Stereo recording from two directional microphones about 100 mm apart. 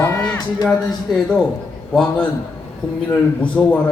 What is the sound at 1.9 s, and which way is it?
Speech, 5° left (ahead or behind).